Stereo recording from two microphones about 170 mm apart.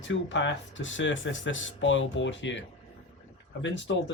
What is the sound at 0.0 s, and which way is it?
Speech, 90° left.